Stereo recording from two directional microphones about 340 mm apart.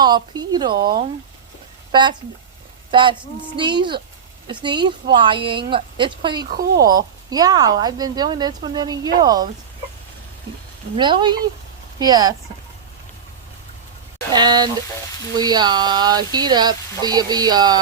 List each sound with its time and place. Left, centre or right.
0.0 s a woman's voice: centre
1.9 s a woman's voice: centre
6.5 s speech: right
6.8 s a woman's voice: centre
10.9 s a woman's voice: centre
14.3 s a woman's voice: centre